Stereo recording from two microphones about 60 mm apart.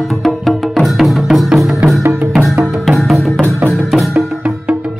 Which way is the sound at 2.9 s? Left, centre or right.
Centre.